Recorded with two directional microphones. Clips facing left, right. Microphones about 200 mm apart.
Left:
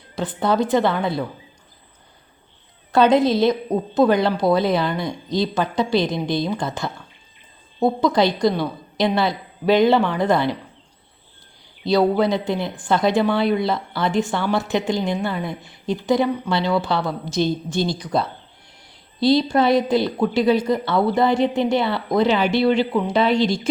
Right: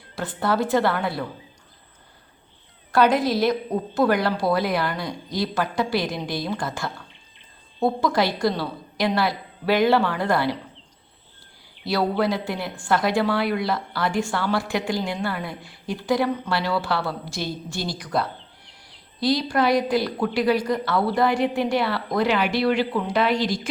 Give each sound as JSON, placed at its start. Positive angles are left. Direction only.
{"t": 0.2, "sound": "a woman's voice", "side_deg": 20}
{"t": 2.9, "sound": "a woman's voice", "side_deg": 20}
{"t": 11.9, "sound": "a woman's voice", "side_deg": 20}